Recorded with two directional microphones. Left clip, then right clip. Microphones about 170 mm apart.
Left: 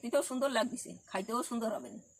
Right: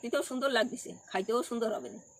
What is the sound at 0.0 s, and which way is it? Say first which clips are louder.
Speech: even; 25° left (ahead or behind).